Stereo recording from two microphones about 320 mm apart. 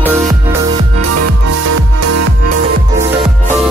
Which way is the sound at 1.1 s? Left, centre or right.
Right.